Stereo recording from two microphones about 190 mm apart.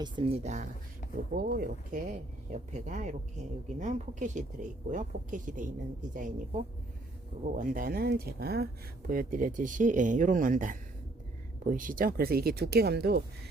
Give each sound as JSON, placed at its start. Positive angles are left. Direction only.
{"t": 0.0, "sound": "speech", "side_deg": -30}
{"t": 1.0, "sound": "a sound", "side_deg": 45}
{"t": 1.4, "sound": "speech", "side_deg": -50}
{"t": 7.5, "sound": "speech", "side_deg": -45}